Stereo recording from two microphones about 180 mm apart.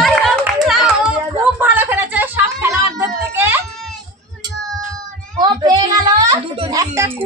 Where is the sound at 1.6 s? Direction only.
10° right (ahead or behind).